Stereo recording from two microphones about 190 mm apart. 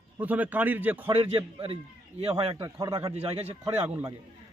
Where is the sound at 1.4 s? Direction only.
25° right (ahead or behind).